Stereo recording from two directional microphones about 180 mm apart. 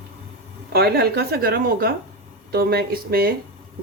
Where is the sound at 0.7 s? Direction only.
60° right (ahead or behind).